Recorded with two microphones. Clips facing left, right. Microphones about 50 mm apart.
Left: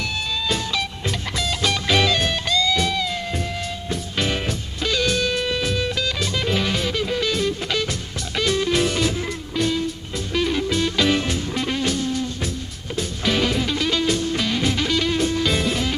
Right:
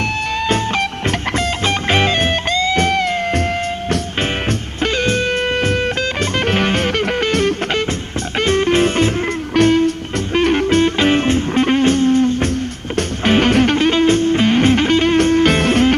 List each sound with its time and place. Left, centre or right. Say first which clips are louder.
1.3 s music: right 2 dB; right
4.8 s music: right 4 dB; right
9.6 s music: right 10 dB; right